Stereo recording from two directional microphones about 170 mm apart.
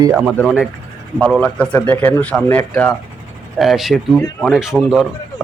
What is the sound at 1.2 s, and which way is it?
Speech, 5° left (ahead or behind).